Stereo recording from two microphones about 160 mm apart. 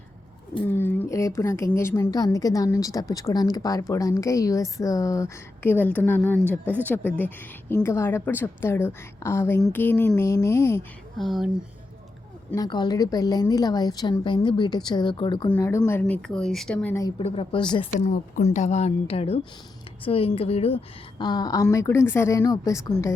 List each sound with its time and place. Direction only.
0.8 s a woman's voice: 15° left (ahead or behind)
11.2 s speech: centre (ahead or behind)
12.5 s speech: 25° left (ahead or behind)
15.5 s a woman's voice: 15° left (ahead or behind)
17.2 s a woman's voice: 35° left (ahead or behind)
18.0 s speech: 45° left (ahead or behind); by 23.1 s 20° left (ahead or behind)